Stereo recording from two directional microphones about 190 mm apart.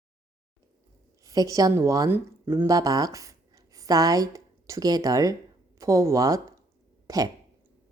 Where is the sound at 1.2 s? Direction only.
20° right (ahead or behind).